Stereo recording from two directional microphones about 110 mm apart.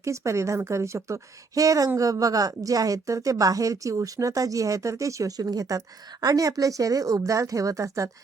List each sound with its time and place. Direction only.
0.0 s a woman's voice: 25° right (ahead or behind)